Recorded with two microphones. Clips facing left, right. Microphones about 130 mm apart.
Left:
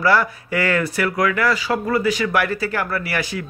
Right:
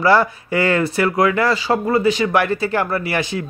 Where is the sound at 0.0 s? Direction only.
25° right (ahead or behind).